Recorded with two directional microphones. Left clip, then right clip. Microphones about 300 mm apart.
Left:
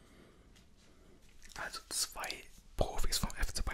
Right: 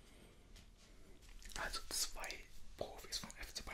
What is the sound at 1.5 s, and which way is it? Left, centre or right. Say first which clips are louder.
Whispering: left 2 dB; centre.